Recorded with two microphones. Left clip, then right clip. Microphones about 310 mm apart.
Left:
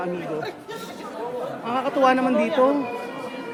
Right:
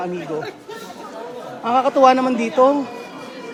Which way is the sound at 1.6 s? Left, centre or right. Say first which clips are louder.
Right 7 dB; centre.